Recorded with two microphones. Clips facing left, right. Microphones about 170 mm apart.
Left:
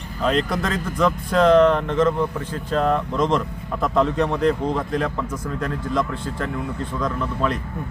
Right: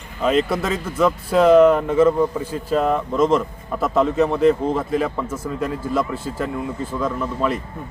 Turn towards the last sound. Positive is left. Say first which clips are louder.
# right 1 dB
turn(degrees=-5)  # may be behind; listen again after turning